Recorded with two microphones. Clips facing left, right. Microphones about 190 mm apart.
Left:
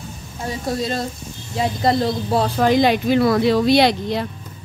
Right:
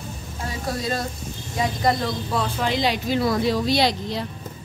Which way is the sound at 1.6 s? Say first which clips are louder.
Left 4 dB; 30° left (ahead or behind).